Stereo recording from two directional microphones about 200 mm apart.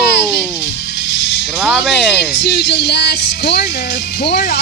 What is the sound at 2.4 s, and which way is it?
Speech, 60° left (ahead or behind).